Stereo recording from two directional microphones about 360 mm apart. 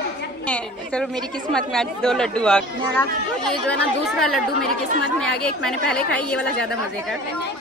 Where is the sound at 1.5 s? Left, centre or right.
Centre.